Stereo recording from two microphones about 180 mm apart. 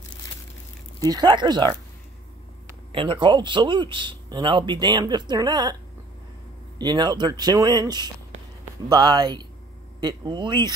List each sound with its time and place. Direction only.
0.9 s speech: 20° right (ahead or behind)
2.9 s speech: 30° right (ahead or behind)
6.8 s speech: 25° right (ahead or behind)